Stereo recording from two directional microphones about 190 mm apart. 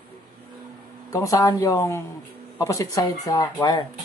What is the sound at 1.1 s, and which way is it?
Speech, 20° left (ahead or behind).